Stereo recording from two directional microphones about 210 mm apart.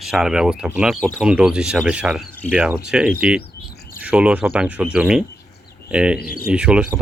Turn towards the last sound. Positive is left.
turn(degrees=-5)  # may be behind; listen again after turning